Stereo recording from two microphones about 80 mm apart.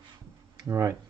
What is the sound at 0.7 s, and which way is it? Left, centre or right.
Speech, right.